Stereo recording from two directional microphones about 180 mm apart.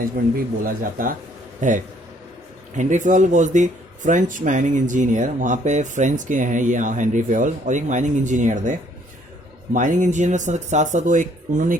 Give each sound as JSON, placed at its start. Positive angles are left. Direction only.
{"t": 0.6, "sound": "speech", "side_deg": -50}
{"t": 9.7, "sound": "speech", "side_deg": -45}